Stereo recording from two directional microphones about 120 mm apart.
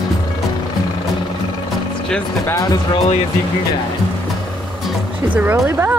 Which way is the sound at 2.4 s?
25° left (ahead or behind).